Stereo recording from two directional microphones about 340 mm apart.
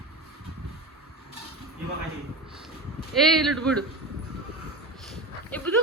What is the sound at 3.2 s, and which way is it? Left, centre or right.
Speech, centre.